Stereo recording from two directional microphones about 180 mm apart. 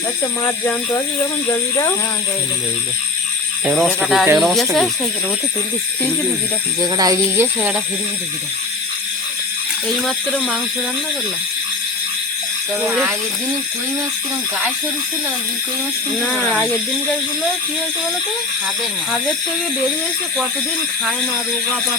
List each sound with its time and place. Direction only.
0.4 s speech: 15° left (ahead or behind)
3.7 s speech: centre (ahead or behind)
6.0 s speech: 5° left (ahead or behind)
6.9 s speech: 20° right (ahead or behind)
7.3 s speech: 10° right (ahead or behind)
9.9 s speech: centre (ahead or behind)
12.8 s speech: 10° right (ahead or behind)
16.1 s speech: 5° left (ahead or behind)